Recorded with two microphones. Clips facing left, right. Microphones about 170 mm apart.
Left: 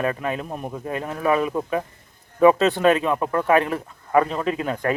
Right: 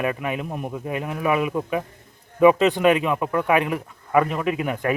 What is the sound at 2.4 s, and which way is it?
A man's voice, 15° right (ahead or behind).